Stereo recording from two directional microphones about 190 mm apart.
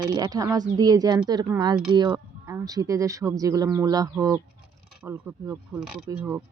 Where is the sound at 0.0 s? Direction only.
20° right (ahead or behind).